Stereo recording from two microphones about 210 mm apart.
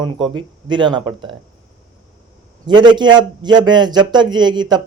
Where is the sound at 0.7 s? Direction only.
20° right (ahead or behind).